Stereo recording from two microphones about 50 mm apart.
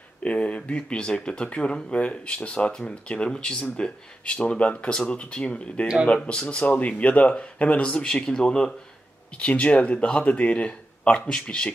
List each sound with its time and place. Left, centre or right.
0.2 s speech: left